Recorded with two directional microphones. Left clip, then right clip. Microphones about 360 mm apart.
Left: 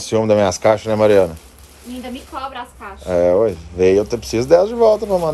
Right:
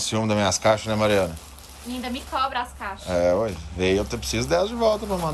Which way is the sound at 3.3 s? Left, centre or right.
Left.